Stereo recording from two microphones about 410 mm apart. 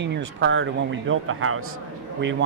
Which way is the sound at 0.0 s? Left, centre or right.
Right.